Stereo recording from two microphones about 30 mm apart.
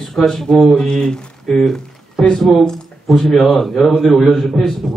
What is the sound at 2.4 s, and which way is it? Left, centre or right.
A man's voice, centre.